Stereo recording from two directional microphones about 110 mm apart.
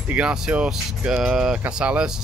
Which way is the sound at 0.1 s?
10° right (ahead or behind).